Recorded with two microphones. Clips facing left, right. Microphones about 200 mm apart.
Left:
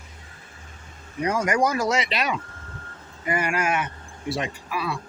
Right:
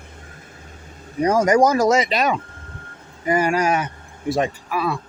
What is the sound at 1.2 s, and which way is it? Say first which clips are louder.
Speech: right 7 dB; 40° right (ahead or behind).